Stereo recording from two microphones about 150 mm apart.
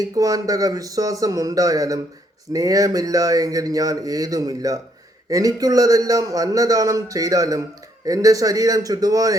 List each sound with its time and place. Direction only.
0.0 s speech: 25° right (ahead or behind)